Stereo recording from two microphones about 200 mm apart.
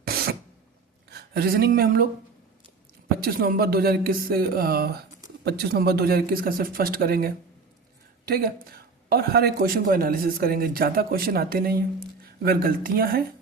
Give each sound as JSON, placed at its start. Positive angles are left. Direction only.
{"t": 0.0, "sound": "a sound", "side_deg": -50}
{"t": 1.1, "sound": "speech", "side_deg": -50}
{"t": 3.2, "sound": "speech", "side_deg": -50}